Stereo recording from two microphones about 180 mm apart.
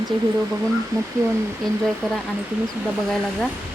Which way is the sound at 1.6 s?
Centre (ahead or behind).